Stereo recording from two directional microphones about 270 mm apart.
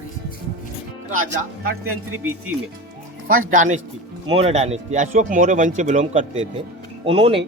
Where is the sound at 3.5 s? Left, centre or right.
Right.